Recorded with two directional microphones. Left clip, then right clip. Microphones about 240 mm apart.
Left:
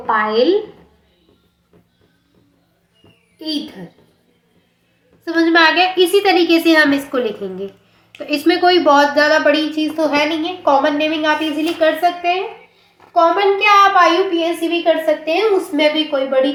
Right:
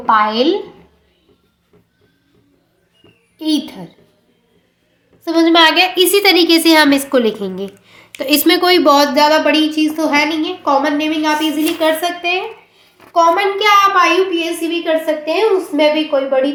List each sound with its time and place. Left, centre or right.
5.2 s a woman's voice: right
15.2 s a woman's voice: centre